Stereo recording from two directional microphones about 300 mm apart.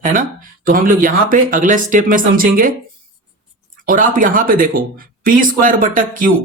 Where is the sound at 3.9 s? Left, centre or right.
Right.